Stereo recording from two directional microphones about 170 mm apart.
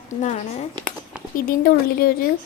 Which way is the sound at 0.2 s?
45° left (ahead or behind).